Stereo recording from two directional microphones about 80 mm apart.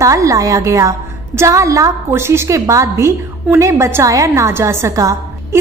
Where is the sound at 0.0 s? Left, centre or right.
Right.